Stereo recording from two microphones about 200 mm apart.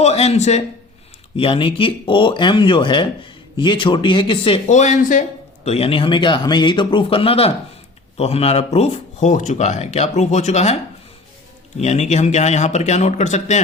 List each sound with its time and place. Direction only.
0.0 s a man's voice: 30° left (ahead or behind)
4.7 s a man's voice: 40° left (ahead or behind)
11.8 s speech: 35° left (ahead or behind)